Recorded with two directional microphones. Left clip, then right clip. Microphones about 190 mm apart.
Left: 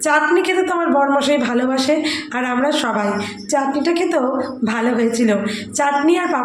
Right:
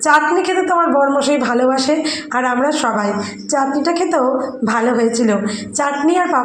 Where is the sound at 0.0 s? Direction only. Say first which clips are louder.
Right 2 dB; centre (ahead or behind).